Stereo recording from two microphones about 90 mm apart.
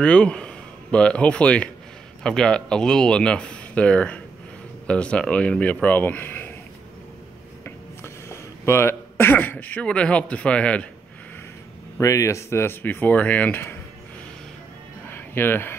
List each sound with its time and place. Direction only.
0.0 s speech: 10° left (ahead or behind)
7.6 s speech: 30° left (ahead or behind)
12.0 s speech: 35° left (ahead or behind)
15.0 s music: 25° left (ahead or behind)